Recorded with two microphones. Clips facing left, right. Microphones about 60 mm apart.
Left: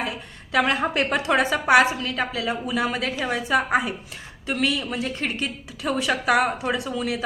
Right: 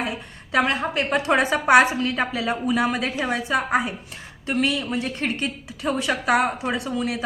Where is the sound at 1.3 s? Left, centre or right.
Centre.